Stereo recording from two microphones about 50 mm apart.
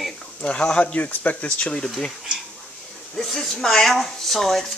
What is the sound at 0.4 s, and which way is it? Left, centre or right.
Speech, left.